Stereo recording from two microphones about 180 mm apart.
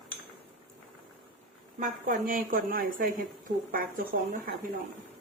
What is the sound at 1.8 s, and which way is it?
A woman's voice, 50° right (ahead or behind).